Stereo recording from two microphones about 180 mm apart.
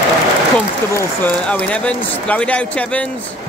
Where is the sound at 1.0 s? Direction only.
5° left (ahead or behind).